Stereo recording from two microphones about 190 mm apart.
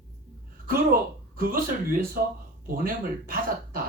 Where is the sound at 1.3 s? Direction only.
50° right (ahead or behind).